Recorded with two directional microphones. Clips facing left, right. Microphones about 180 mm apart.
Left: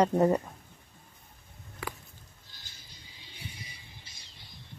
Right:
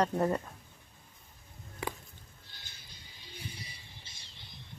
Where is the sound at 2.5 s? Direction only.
60° right (ahead or behind).